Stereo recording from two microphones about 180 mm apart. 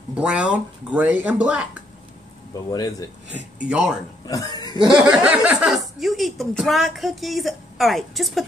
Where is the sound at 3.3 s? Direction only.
5° right (ahead or behind).